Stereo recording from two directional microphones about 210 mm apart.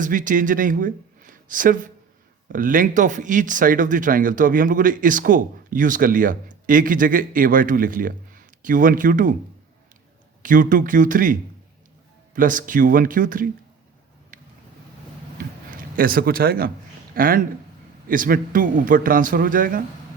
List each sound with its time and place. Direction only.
0.0 s speech: 40° right (ahead or behind)
10.4 s speech: 40° right (ahead or behind)
14.3 s vehicle: 40° right (ahead or behind)
15.4 s a sound: 45° right (ahead or behind)
17.2 s speech: 40° right (ahead or behind)